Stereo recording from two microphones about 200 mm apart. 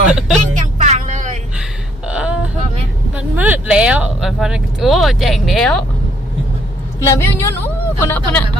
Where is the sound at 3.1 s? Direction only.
10° right (ahead or behind).